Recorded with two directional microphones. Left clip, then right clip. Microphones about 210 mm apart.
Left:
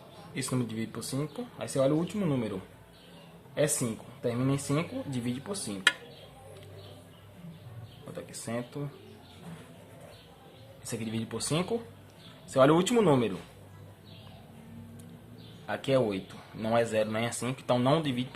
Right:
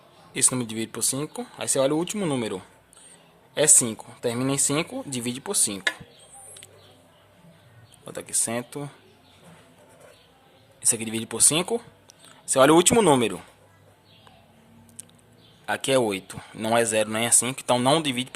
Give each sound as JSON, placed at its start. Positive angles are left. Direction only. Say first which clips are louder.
{"t": 0.3, "sound": "a man's voice", "louder": "right 7 dB", "side_deg": -50}
{"t": 8.1, "sound": "a man's voice", "louder": "right 8 dB", "side_deg": -50}
{"t": 10.8, "sound": "a man's voice", "louder": "right 8 dB", "side_deg": -50}
{"t": 15.6, "sound": "a man's voice", "louder": "right 5 dB", "side_deg": -50}